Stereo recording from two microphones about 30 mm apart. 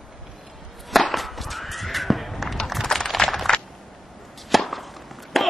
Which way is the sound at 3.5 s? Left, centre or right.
Left.